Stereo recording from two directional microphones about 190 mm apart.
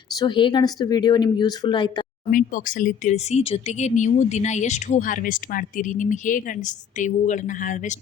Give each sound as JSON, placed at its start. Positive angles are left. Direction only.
{"t": 0.2, "sound": "speech", "side_deg": 25}
{"t": 2.3, "sound": "speech", "side_deg": 45}